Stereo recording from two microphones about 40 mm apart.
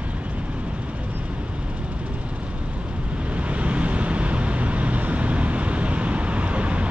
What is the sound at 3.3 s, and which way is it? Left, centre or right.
Vehicle, right.